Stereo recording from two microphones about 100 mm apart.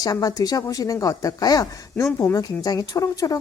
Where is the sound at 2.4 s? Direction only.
40° left (ahead or behind).